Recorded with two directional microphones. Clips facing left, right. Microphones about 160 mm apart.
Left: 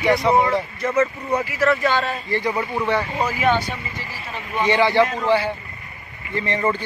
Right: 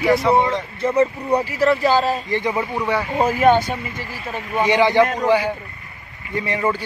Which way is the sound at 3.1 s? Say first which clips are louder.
Right 5 dB; 50° right (ahead or behind).